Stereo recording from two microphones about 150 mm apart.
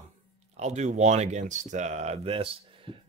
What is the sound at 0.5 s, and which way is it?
Speech, 50° right (ahead or behind).